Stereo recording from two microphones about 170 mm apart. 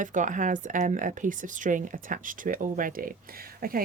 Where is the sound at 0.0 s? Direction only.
50° right (ahead or behind).